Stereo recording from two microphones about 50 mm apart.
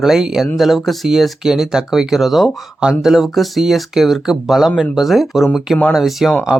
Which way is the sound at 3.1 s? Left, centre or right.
Centre.